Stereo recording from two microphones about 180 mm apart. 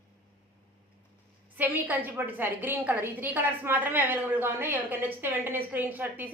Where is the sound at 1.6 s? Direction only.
10° right (ahead or behind).